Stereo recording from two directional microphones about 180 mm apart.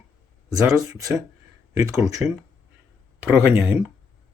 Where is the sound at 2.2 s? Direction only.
5° right (ahead or behind).